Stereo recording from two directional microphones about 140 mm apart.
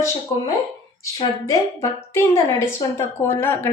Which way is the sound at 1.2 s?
20° left (ahead or behind).